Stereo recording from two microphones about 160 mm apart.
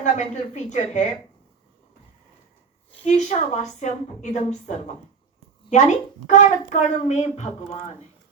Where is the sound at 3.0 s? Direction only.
45° left (ahead or behind).